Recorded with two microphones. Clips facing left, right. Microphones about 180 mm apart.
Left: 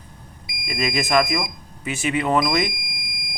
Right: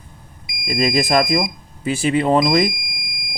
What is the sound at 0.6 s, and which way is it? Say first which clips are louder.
Speech: right 6 dB; 35° right (ahead or behind).